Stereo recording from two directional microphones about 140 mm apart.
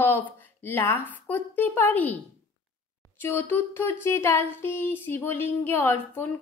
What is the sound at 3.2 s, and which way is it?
Speech, 15° left (ahead or behind).